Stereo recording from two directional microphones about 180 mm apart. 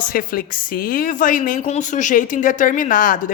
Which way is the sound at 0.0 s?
50° left (ahead or behind).